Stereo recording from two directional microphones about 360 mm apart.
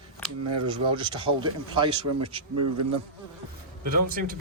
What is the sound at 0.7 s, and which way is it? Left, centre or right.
Speech, centre.